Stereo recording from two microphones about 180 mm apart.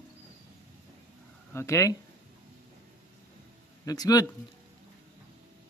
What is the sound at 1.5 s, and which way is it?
Speech, 15° left (ahead or behind).